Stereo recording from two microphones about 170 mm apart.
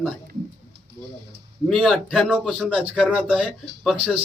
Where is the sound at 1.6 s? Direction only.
Centre (ahead or behind).